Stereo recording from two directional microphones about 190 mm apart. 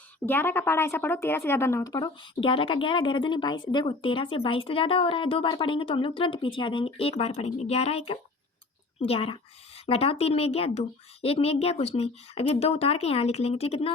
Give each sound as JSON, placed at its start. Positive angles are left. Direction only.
{"t": 0.3, "sound": "a woman's voice", "side_deg": 10}